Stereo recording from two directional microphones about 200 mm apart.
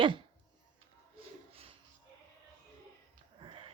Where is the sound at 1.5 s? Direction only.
30° right (ahead or behind).